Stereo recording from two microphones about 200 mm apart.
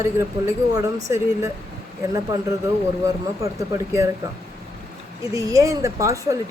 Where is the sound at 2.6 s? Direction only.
15° right (ahead or behind).